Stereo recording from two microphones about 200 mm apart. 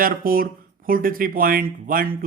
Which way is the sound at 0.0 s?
45° right (ahead or behind).